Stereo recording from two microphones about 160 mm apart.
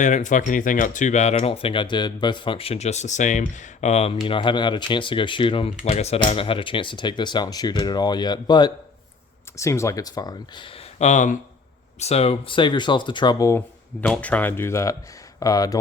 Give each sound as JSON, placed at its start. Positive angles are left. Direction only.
{"t": 0.0, "sound": "speech", "side_deg": 50}
{"t": 4.3, "sound": "speech", "side_deg": 30}
{"t": 10.9, "sound": "speech", "side_deg": 45}
{"t": 14.0, "sound": "speech", "side_deg": 10}